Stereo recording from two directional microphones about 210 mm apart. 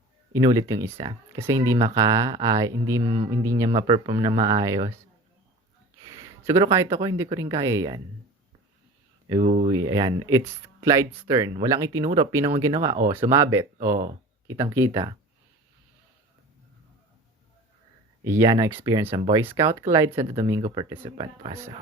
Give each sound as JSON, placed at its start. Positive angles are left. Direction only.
{"t": 0.3, "sound": "speech", "side_deg": -15}
{"t": 6.1, "sound": "speech", "side_deg": -15}
{"t": 9.3, "sound": "speech", "side_deg": -30}
{"t": 9.7, "sound": "speech", "side_deg": -20}
{"t": 18.3, "sound": "speech", "side_deg": -15}